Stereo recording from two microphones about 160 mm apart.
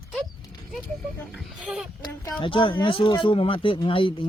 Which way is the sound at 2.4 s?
30° left (ahead or behind).